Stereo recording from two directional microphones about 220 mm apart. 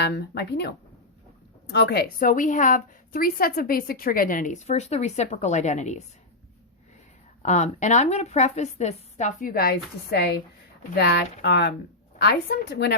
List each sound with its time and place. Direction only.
0.0 s a woman's voice: 50° left (ahead or behind); by 6.0 s 35° left (ahead or behind)
7.4 s a woman's voice: 35° left (ahead or behind); by 12.9 s 50° left (ahead or behind)